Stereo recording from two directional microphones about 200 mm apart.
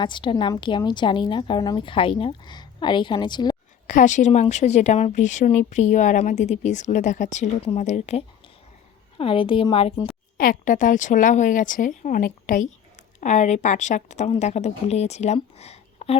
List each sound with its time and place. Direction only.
0.0 s a woman's voice: 25° left (ahead or behind)
3.8 s a woman's voice: 40° left (ahead or behind)
10.3 s speech: 45° left (ahead or behind)